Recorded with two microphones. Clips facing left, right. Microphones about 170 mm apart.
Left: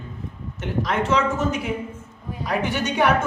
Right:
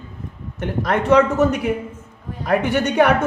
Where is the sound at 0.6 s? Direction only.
55° right (ahead or behind).